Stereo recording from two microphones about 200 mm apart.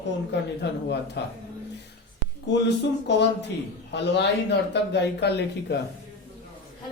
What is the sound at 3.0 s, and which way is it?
Speech, 60° left (ahead or behind).